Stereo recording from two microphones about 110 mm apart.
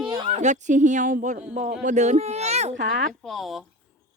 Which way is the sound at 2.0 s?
80° right.